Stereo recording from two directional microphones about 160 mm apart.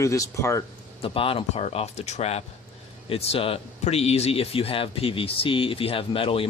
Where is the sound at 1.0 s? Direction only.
35° left (ahead or behind).